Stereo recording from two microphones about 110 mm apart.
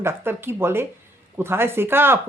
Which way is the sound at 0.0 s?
20° right (ahead or behind).